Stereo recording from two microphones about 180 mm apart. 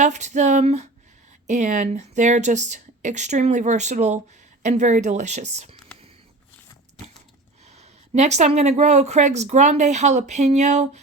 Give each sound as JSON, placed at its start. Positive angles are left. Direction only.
{"t": 0.0, "sound": "speech", "side_deg": -40}
{"t": 7.6, "sound": "speech", "side_deg": -40}